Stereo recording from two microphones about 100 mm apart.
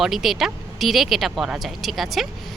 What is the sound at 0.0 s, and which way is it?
A woman's voice, centre (ahead or behind).